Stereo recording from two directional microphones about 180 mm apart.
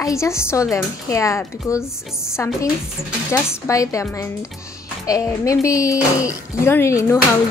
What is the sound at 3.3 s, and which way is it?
Speech, 15° left (ahead or behind).